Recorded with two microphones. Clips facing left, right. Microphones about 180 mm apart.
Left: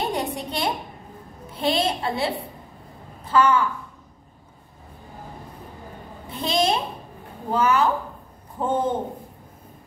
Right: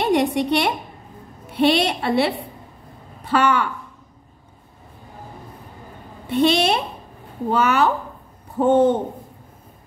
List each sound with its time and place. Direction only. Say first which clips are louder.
0.0 s a sound: right 8 dB; 75° right (ahead or behind)
1.5 s a woman's voice: right 5 dB; 75° right (ahead or behind)
6.2 s a woman's voice: right 5 dB; 75° right (ahead or behind)